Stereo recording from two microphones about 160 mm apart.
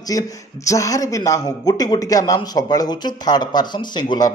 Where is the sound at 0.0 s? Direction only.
20° left (ahead or behind).